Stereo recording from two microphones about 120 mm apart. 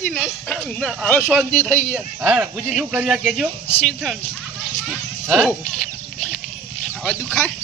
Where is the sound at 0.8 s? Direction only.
10° left (ahead or behind).